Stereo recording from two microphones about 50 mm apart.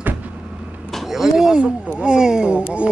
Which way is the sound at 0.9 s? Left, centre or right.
Centre.